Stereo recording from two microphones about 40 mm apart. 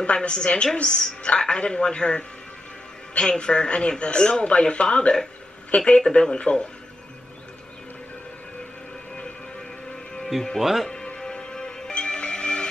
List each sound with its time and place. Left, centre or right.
0.0 s a woman's voice: left
10.6 s speech: centre
11.1 s music: centre